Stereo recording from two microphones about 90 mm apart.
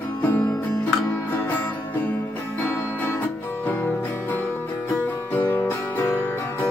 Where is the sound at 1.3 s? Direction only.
20° left (ahead or behind).